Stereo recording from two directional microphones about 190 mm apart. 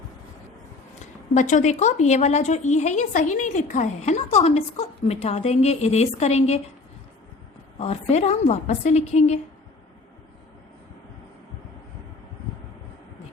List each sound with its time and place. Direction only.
1.3 s a woman's voice: 40° left (ahead or behind)
7.8 s a woman's voice: 35° left (ahead or behind)